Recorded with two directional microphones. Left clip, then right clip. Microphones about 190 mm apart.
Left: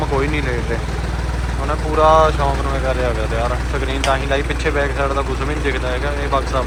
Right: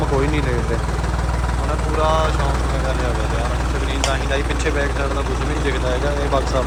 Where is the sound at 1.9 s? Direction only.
10° right (ahead or behind).